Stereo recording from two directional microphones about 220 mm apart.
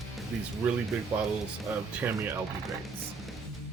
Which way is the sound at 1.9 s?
10° right (ahead or behind).